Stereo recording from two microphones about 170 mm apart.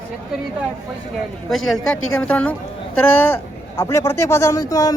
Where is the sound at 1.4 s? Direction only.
Centre (ahead or behind).